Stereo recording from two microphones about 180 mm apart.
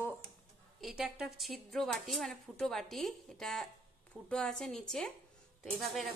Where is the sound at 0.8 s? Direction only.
5° right (ahead or behind).